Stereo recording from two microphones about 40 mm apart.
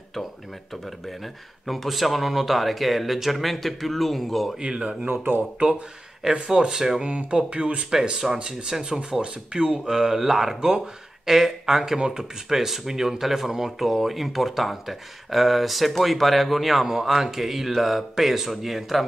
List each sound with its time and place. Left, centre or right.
0.8 s speech: centre
4.6 s speech: right
5.0 s speech: right
6.2 s speech: centre
7.0 s speech: right
8.0 s speech: centre
8.4 s speech: right
9.8 s speech: centre